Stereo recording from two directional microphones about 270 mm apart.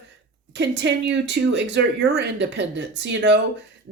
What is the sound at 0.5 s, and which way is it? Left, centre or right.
Speech, right.